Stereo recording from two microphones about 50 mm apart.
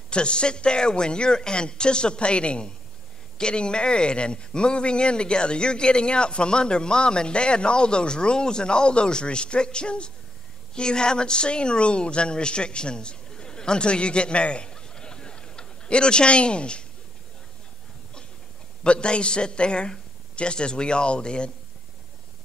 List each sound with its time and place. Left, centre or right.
0.1 s speech: left
18.9 s speech: centre